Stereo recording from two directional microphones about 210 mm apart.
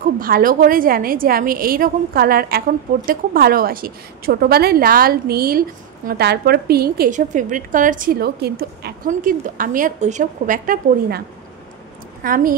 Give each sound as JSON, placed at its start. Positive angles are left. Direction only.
{"t": 0.2, "sound": "a woman's voice", "side_deg": -45}